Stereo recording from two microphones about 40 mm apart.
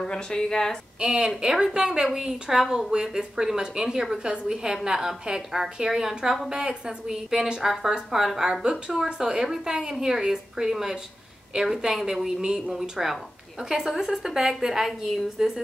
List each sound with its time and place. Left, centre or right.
0.0 s speech: centre
0.9 s a woman's voice: centre
6.5 s a woman's voice: centre